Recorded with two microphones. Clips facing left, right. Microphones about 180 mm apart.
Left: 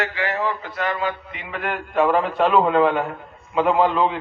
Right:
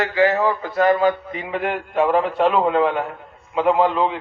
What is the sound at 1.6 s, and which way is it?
A man's voice, 25° right (ahead or behind).